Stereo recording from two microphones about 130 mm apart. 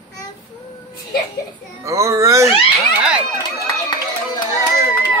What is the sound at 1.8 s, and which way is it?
Speech, 25° right (ahead or behind).